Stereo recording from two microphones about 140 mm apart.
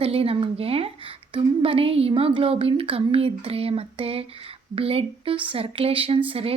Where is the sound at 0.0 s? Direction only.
45° right (ahead or behind).